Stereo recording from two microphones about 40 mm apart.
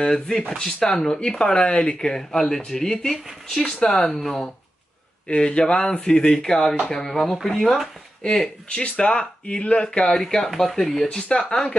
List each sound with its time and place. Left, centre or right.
0.0 s speech: centre
1.5 s speech: left
2.0 s speech: centre
5.3 s speech: left; by 7.9 s centre
8.2 s speech: left
11.1 s speech: left